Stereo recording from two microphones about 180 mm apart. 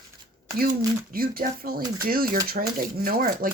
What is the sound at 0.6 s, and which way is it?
Speech, 55° right (ahead or behind).